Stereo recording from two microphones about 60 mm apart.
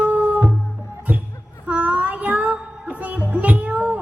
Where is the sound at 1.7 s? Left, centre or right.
Right.